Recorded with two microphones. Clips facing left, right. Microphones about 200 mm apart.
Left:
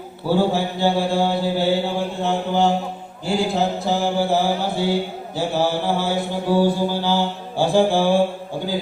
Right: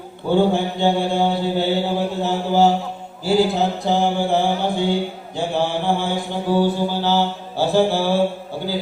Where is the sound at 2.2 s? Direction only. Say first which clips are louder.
Right 2 dB; 5° right (ahead or behind).